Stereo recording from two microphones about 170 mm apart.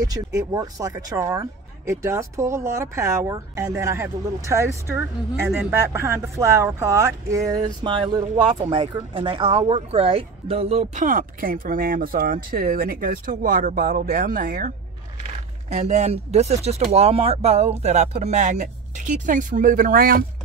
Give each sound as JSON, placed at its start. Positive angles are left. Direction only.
{"t": 0.0, "sound": "speech", "side_deg": -20}
{"t": 15.7, "sound": "speech", "side_deg": -40}